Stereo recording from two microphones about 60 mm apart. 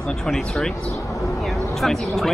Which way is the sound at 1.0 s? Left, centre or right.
Left.